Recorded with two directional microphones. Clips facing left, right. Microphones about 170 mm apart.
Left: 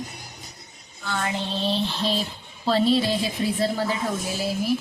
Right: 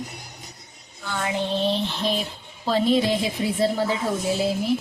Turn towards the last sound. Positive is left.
turn(degrees=-25)  # may be behind; listen again after turning